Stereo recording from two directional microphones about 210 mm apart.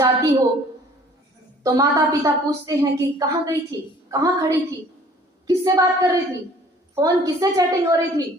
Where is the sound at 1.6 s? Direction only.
20° right (ahead or behind).